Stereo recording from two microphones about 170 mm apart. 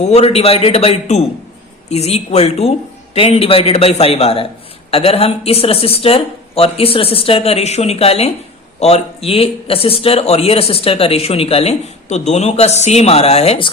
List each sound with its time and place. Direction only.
0.0 s speech: 40° left (ahead or behind)